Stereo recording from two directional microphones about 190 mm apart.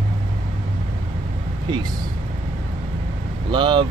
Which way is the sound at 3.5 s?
25° right (ahead or behind).